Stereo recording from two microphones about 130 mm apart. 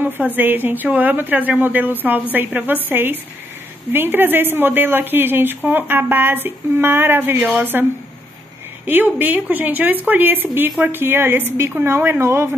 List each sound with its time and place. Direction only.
0.4 s speech: 15° right (ahead or behind)
8.8 s speech: 15° right (ahead or behind)